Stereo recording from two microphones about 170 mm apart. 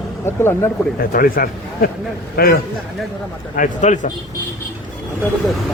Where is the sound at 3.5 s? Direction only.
45° left (ahead or behind).